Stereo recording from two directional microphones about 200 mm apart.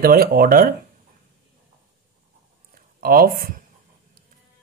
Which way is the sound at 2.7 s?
45° right (ahead or behind).